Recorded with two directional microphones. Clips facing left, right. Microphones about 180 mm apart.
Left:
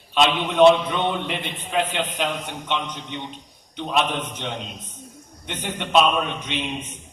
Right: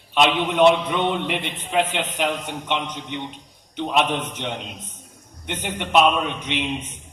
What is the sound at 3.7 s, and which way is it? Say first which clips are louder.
A man's voice: right 2 dB; 20° right (ahead or behind).